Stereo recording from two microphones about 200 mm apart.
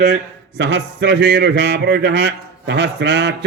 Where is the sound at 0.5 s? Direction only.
60° right (ahead or behind).